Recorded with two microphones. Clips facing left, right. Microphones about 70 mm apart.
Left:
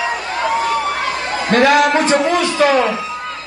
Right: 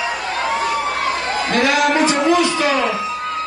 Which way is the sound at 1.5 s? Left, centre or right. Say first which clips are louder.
Left 5 dB; left.